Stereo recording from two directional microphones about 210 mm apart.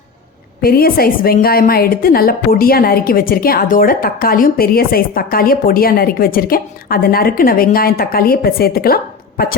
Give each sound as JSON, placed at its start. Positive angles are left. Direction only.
{"t": 0.6, "sound": "a woman's voice", "side_deg": 45}